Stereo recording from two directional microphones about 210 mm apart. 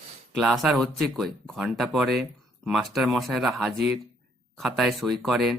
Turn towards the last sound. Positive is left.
turn(degrees=0)  # may be behind; listen again after turning